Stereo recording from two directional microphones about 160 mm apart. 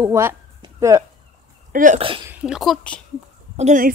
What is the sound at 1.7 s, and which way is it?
Speech, 55° right (ahead or behind).